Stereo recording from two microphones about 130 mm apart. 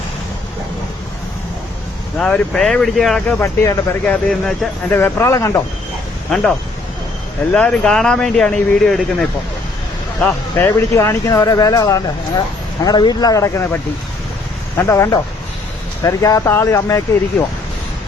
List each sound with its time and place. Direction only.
2.1 s speech: 10° left (ahead or behind)
3.4 s speech: 20° left (ahead or behind)
4.0 s speech: 5° left (ahead or behind)
4.9 s speech: 15° left (ahead or behind)
7.5 s speech: 5° left (ahead or behind); by 13.7 s 20° left (ahead or behind)
14.8 s speech: 20° left (ahead or behind)